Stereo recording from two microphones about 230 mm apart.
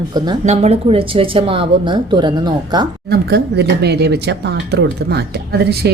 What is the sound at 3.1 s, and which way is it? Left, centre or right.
Speech, right.